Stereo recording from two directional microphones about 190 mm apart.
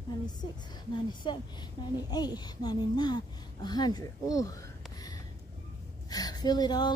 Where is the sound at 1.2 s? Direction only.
25° left (ahead or behind).